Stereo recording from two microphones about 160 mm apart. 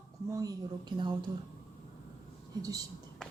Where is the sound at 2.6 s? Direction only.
20° right (ahead or behind).